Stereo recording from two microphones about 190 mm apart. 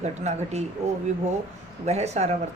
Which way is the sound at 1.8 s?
35° right (ahead or behind).